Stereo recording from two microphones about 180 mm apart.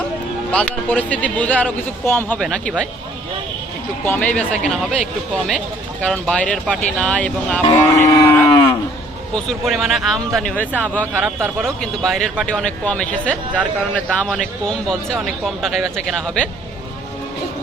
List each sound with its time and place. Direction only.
0.5 s speech: 10° left (ahead or behind)
4.0 s speech: 10° left (ahead or behind)
7.9 s cattle: 15° left (ahead or behind)
9.3 s speech: centre (ahead or behind)